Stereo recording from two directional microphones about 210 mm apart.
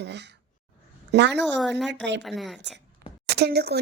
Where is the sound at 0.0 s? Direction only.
55° right (ahead or behind).